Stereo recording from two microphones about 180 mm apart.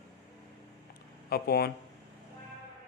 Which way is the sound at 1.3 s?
60° left (ahead or behind).